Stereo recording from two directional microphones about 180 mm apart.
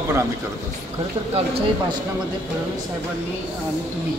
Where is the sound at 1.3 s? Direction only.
30° right (ahead or behind).